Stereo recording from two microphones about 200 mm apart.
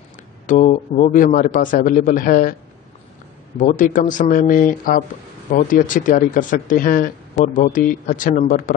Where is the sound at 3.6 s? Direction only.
40° left (ahead or behind).